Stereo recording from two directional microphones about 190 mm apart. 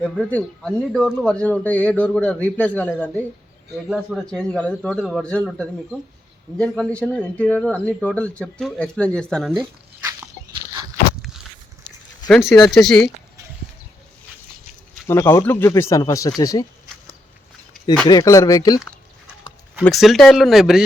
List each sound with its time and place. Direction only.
0.0 s speech: 5° left (ahead or behind)
3.8 s speech: centre (ahead or behind)
10.0 s a sound: 15° right (ahead or behind)
12.3 s speech: centre (ahead or behind)
15.0 s speech: 15° left (ahead or behind)
18.1 s speech: 20° left (ahead or behind)
19.8 s speech: centre (ahead or behind)